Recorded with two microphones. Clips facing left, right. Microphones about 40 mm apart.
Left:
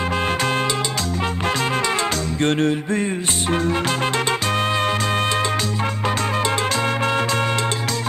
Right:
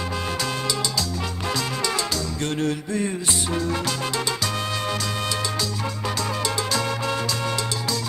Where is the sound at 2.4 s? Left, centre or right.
Left.